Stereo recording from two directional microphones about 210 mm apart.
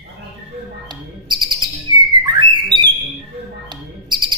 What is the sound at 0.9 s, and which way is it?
Owl, 20° right (ahead or behind).